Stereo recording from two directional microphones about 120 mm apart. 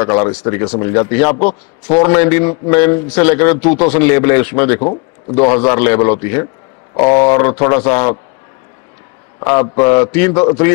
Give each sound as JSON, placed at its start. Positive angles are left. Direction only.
{"t": 0.0, "sound": "a man's voice", "side_deg": 25}
{"t": 6.9, "sound": "a man's voice", "side_deg": 35}
{"t": 9.5, "sound": "a man's voice", "side_deg": 30}